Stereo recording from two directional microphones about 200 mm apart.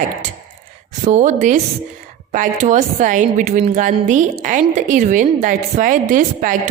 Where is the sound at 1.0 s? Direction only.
35° right (ahead or behind).